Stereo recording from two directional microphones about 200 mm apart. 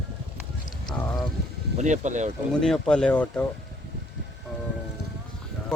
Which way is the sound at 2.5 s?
5° left (ahead or behind).